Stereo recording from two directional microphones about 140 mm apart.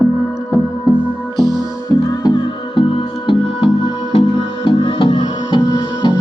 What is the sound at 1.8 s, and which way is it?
Music, 25° left (ahead or behind).